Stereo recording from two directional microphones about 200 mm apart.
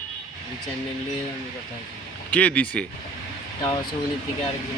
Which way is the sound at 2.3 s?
5° left (ahead or behind).